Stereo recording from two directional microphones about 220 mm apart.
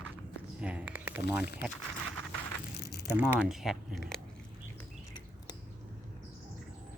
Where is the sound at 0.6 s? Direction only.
5° right (ahead or behind).